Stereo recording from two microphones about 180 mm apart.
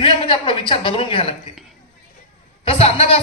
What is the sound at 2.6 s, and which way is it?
Speech, 35° left (ahead or behind).